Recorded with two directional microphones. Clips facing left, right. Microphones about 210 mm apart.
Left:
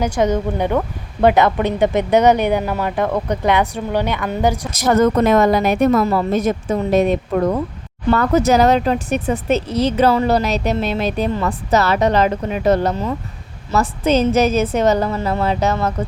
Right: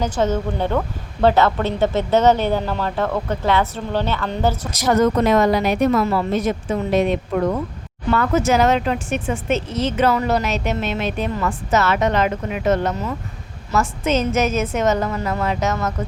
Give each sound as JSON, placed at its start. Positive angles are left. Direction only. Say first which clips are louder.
{"t": 0.0, "sound": "speech", "louder": "left 3 dB", "side_deg": 15}
{"t": 4.7, "sound": "a woman's voice", "louder": "left 2 dB", "side_deg": 50}